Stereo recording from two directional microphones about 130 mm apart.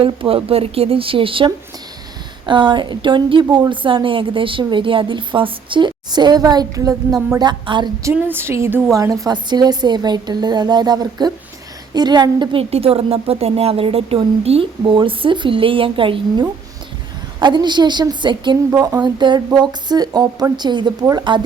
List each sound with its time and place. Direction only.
0.0 s a woman's voice: 45° right (ahead or behind)
8.1 s a woman's voice: 15° right (ahead or behind); by 12.6 s 35° right (ahead or behind)
12.7 s a woman's voice: 50° right (ahead or behind)